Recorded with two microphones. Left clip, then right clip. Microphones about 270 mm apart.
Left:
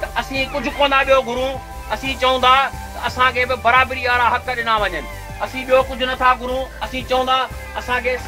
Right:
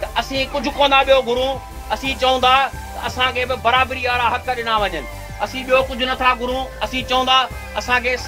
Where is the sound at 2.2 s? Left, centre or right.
Right.